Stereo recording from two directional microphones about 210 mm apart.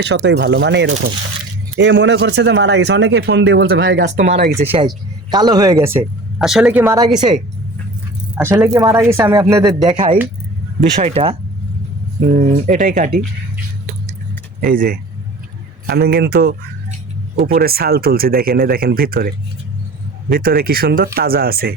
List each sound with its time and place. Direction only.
0.0 s speech: 55° right (ahead or behind)
4.7 s speech: 20° right (ahead or behind)
8.4 s speech: 10° right (ahead or behind); by 13.1 s 40° right (ahead or behind)
14.6 s speech: 40° right (ahead or behind)
20.3 s speech: 45° right (ahead or behind)